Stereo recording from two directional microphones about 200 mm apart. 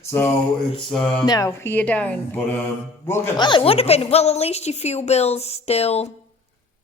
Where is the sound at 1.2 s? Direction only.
20° left (ahead or behind).